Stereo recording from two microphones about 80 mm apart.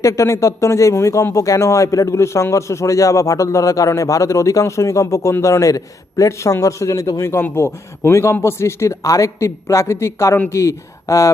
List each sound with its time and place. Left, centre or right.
0.0 s speech: left